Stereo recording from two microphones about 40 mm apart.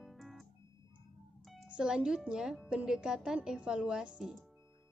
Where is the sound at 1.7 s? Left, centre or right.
Right.